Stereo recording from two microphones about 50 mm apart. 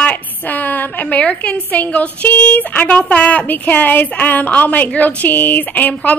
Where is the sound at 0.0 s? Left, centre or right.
Left.